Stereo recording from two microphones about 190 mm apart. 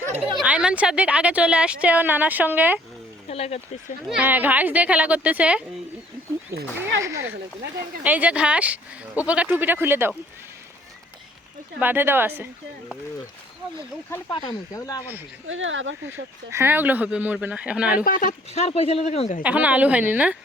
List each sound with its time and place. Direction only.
0.3 s a woman's voice: 5° right (ahead or behind)
3.2 s a sound: 35° left (ahead or behind)
4.1 s a woman's voice: 10° right (ahead or behind)
7.0 s a woman's voice: 15° right (ahead or behind)
11.8 s a woman's voice: 10° right (ahead or behind)
14.1 s speech: 20° left (ahead or behind)
15.4 s speech: 90° right
16.5 s a woman's voice: 10° right (ahead or behind)
18.0 s speech: 45° left (ahead or behind)
19.4 s a woman's voice: 10° right (ahead or behind)